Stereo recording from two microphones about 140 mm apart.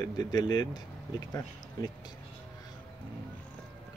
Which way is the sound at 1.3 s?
30° left (ahead or behind).